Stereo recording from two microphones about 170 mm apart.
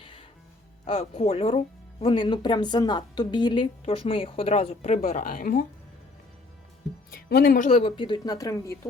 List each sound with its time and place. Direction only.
0.0 s music: 30° left (ahead or behind)
0.9 s speech: 35° left (ahead or behind)
4.9 s speech: 60° left (ahead or behind)
7.1 s speech: 65° left (ahead or behind)
7.7 s a woman's voice: 35° left (ahead or behind); by 8.9 s 20° left (ahead or behind)